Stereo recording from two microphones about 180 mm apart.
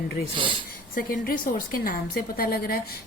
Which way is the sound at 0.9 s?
50° left (ahead or behind).